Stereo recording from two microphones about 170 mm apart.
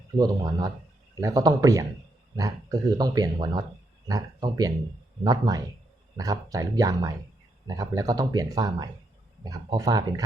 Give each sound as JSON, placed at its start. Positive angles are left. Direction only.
{"t": 0.2, "sound": "speech", "side_deg": -20}